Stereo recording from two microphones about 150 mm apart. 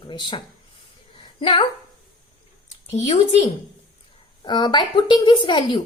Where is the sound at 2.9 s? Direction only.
45° left (ahead or behind).